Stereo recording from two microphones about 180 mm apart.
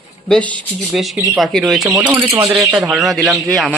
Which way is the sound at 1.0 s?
Centre (ahead or behind).